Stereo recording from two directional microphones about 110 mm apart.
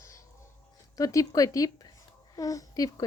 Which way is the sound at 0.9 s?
30° left (ahead or behind).